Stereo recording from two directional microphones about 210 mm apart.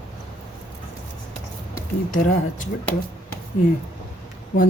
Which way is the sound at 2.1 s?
40° left (ahead or behind).